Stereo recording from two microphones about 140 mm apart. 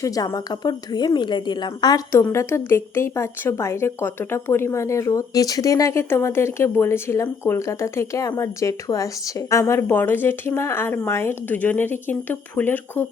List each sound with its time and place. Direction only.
0.0 s a woman's voice: 25° left (ahead or behind)